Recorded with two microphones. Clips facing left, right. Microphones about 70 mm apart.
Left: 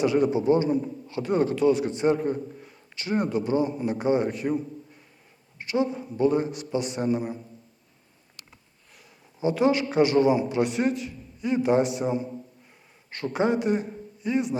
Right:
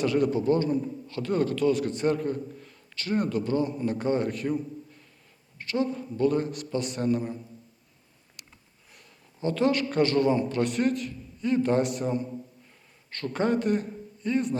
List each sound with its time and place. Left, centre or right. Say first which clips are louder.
0.3 s a man's voice: left 2 dB; centre
5.5 s a man's voice: left 2 dB; centre
9.4 s a man's voice: left 3 dB; centre